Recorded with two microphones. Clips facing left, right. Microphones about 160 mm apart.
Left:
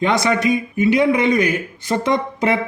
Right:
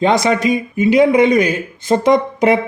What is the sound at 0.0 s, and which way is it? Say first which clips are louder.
Speech: right 3 dB; 20° right (ahead or behind).